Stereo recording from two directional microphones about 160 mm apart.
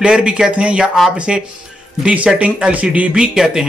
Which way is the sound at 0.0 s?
5° right (ahead or behind).